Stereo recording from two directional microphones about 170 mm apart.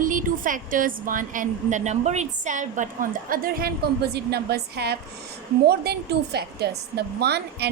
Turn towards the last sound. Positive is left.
turn(degrees=-70)  # may be behind; listen again after turning